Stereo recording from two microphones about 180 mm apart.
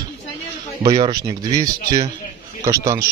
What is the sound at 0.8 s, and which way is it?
Speech, 25° right (ahead or behind).